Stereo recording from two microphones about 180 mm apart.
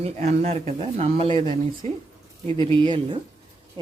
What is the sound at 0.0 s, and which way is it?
Speech, 35° right (ahead or behind).